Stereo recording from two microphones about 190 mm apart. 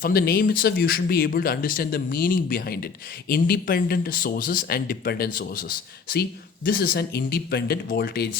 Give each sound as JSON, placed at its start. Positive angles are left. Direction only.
{"t": 0.0, "sound": "speech", "side_deg": 55}